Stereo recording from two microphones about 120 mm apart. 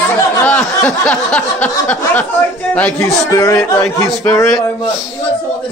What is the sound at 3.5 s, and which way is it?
Speech, 5° left (ahead or behind).